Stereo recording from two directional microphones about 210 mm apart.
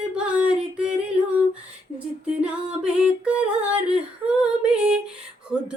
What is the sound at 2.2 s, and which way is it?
Female singing, 5° right (ahead or behind).